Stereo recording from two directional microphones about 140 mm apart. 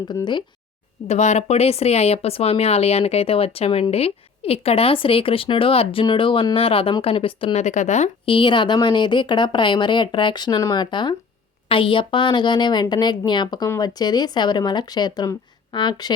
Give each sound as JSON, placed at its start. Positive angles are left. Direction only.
{"t": 0.1, "sound": "speech", "side_deg": 30}
{"t": 1.0, "sound": "speech", "side_deg": 55}
{"t": 7.6, "sound": "speech", "side_deg": 60}
{"t": 8.2, "sound": "speech", "side_deg": 35}